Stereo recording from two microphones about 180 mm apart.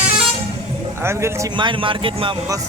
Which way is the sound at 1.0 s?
15° right (ahead or behind).